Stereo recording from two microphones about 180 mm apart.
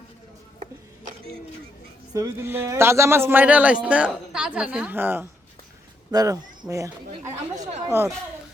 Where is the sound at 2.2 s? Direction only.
15° right (ahead or behind).